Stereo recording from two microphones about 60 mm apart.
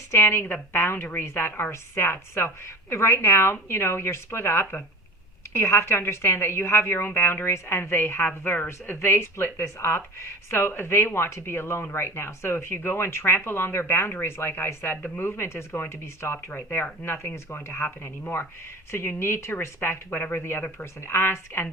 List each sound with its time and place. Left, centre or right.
0.1 s a woman's voice: left
16.5 s speech: left
17.1 s a woman's voice: left